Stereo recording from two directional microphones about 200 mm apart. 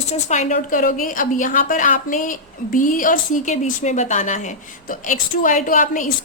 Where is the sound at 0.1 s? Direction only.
35° left (ahead or behind).